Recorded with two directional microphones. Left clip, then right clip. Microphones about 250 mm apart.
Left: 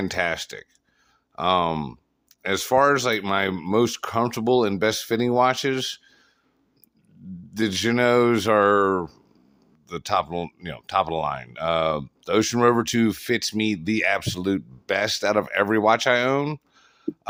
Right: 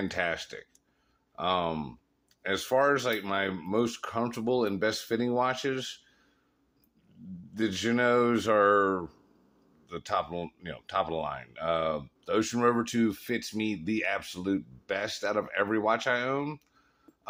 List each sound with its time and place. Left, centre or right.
0.0 s speech: left
7.5 s speech: left